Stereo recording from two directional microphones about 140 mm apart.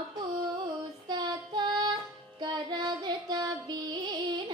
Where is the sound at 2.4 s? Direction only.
30° right (ahead or behind).